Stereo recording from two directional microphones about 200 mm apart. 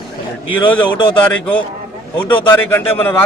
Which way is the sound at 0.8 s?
25° left (ahead or behind).